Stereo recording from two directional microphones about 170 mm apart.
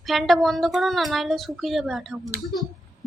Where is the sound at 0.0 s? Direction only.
Centre (ahead or behind).